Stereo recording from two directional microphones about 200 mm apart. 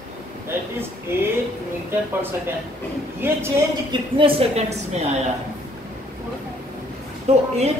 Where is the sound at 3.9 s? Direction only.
25° right (ahead or behind).